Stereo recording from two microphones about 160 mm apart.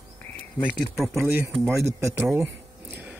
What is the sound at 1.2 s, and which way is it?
Speech, 10° right (ahead or behind).